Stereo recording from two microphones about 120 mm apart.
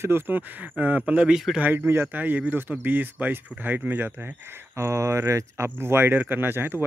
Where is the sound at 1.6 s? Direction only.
20° right (ahead or behind).